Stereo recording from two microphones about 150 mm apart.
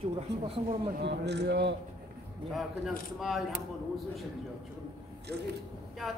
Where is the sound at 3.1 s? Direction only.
Centre (ahead or behind).